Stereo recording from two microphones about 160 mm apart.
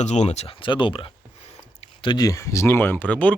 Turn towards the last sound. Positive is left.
turn(degrees=10)  # may be behind; listen again after turning